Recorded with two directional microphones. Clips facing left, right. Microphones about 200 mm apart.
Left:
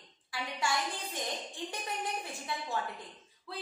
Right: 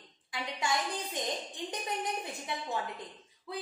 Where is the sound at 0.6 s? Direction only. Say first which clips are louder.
Right 1 dB; 20° right (ahead or behind).